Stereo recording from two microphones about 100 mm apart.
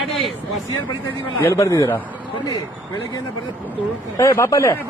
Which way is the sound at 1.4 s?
30° left (ahead or behind).